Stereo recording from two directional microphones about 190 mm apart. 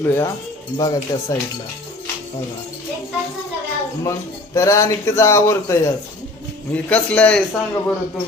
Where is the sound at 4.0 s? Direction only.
15° left (ahead or behind).